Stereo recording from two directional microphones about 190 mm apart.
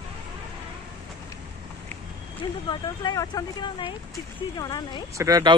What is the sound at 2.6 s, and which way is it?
Speech, 25° left (ahead or behind).